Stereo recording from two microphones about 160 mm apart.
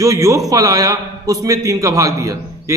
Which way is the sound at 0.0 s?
20° right (ahead or behind).